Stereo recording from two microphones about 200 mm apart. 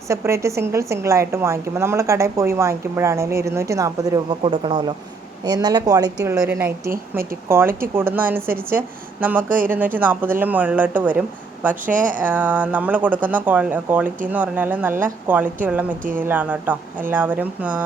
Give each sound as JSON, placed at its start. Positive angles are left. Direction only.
{"t": 0.1, "sound": "a woman's voice", "side_deg": -15}
{"t": 11.9, "sound": "speech", "side_deg": -40}
{"t": 12.2, "sound": "a woman's voice", "side_deg": -10}